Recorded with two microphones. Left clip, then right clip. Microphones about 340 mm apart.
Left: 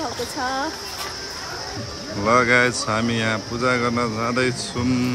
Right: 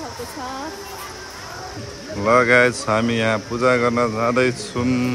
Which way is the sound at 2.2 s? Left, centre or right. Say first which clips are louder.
Right 2 dB; centre.